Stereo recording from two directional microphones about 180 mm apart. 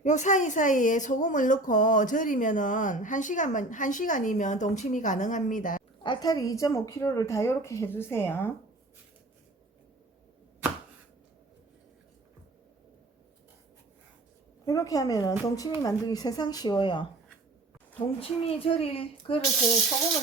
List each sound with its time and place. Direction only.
0.0 s speech: 40° left (ahead or behind)
6.0 s a woman's voice: 25° left (ahead or behind)
14.7 s a woman's voice: 20° left (ahead or behind)
18.2 s a woman's voice: 30° left (ahead or behind)